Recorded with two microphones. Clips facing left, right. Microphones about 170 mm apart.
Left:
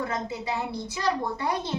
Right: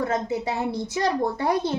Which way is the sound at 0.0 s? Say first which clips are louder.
Right 6 dB; 45° right (ahead or behind).